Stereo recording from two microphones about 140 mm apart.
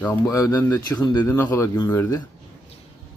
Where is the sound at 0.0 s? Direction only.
20° left (ahead or behind).